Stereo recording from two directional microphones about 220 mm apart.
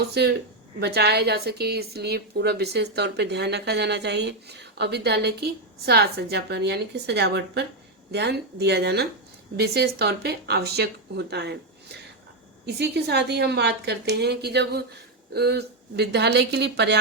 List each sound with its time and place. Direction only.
0.1 s speech: 50° right (ahead or behind)
12.6 s speech: 50° right (ahead or behind)